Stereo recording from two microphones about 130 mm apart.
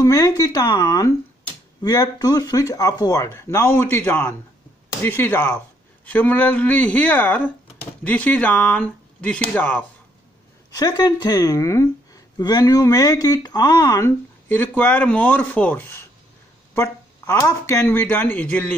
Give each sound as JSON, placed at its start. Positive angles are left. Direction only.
{"t": 0.0, "sound": "speech", "side_deg": 30}
{"t": 10.7, "sound": "speech", "side_deg": 30}